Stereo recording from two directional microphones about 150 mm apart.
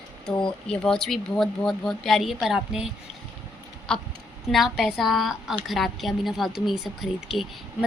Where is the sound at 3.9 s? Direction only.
5° left (ahead or behind).